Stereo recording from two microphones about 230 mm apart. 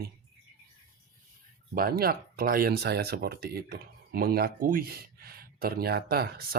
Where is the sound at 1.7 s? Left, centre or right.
Right.